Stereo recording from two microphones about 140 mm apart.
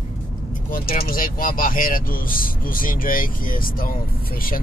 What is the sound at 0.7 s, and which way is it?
Speech, 90° left.